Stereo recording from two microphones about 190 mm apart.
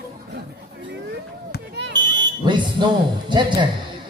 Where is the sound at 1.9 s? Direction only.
25° right (ahead or behind).